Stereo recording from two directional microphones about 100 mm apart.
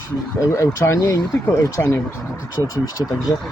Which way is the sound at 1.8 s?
20° left (ahead or behind).